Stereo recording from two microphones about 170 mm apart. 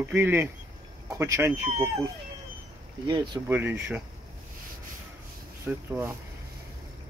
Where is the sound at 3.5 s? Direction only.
10° right (ahead or behind).